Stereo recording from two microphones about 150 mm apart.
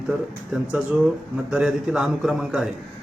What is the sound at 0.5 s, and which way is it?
A man's voice, 5° right (ahead or behind).